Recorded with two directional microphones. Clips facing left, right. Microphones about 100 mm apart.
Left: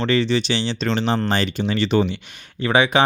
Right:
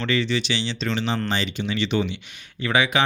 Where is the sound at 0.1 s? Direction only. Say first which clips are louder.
Left 3 dB; 35° left (ahead or behind).